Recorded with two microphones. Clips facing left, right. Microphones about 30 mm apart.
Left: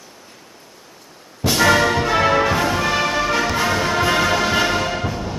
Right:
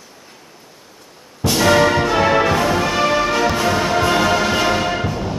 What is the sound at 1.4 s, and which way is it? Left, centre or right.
Music, centre.